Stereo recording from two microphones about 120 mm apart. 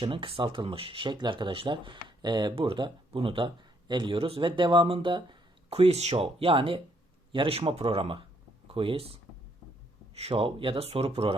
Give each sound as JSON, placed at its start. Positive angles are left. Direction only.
{"t": 0.0, "sound": "speech", "side_deg": -45}